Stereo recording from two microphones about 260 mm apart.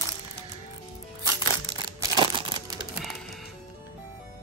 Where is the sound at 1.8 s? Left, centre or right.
Centre.